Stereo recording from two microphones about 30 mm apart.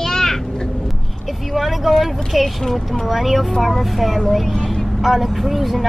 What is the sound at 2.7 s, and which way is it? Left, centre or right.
Speech, centre.